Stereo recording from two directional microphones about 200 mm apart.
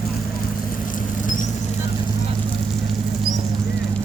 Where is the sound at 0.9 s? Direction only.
40° left (ahead or behind).